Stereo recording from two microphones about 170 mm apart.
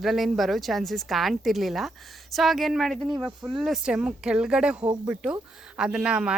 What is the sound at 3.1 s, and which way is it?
Speech, 20° right (ahead or behind).